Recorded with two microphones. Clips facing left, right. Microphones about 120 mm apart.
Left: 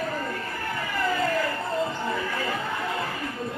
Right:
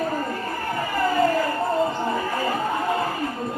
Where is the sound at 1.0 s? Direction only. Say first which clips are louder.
Right 5 dB; 40° right (ahead or behind).